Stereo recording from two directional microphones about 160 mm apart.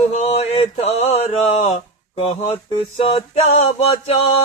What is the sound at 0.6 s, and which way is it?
Mantra, 40° left (ahead or behind).